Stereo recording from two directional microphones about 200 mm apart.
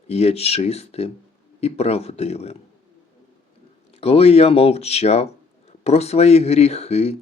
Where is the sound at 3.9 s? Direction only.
30° left (ahead or behind).